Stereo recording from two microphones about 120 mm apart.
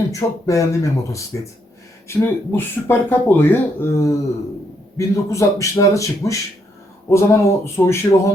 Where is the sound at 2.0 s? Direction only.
20° left (ahead or behind).